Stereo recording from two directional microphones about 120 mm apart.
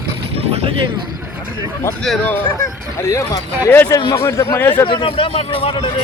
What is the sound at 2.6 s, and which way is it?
Speech, 25° left (ahead or behind).